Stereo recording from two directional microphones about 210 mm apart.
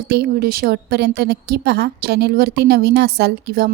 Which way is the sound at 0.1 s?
50° right (ahead or behind).